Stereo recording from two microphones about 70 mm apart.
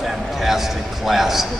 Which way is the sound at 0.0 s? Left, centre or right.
Centre.